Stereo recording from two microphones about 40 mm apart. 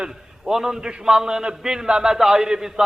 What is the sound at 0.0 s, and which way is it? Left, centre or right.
A man's voice, centre.